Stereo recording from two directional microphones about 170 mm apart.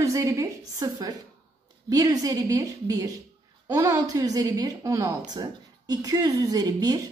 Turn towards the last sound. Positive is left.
turn(degrees=-20)  # may be behind; listen again after turning